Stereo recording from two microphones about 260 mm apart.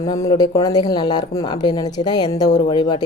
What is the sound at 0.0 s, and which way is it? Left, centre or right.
A woman's voice, centre.